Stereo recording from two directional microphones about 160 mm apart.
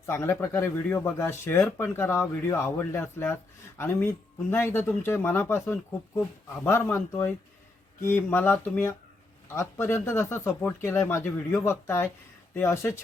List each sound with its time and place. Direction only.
0.0 s speech: 15° left (ahead or behind)